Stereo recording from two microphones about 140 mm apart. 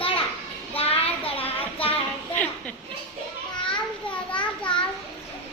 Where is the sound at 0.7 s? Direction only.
45° left (ahead or behind).